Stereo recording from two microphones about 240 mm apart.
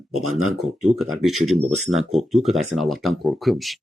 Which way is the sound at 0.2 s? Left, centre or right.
Right.